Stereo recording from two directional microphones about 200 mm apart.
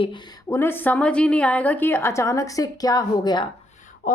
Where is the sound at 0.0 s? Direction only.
20° left (ahead or behind).